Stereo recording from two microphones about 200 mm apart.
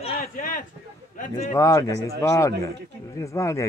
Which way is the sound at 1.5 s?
15° left (ahead or behind).